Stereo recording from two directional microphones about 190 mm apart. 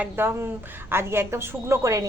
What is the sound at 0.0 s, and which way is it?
A woman's voice, 10° right (ahead or behind).